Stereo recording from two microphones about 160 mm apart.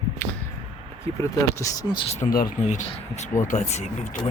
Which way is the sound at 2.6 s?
45° left (ahead or behind).